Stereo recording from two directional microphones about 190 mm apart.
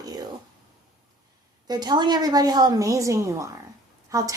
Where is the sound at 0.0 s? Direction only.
20° right (ahead or behind).